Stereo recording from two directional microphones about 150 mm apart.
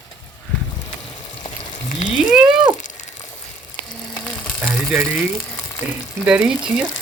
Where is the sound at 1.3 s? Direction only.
30° left (ahead or behind).